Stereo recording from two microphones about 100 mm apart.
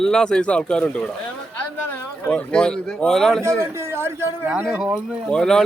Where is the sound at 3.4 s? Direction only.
25° right (ahead or behind).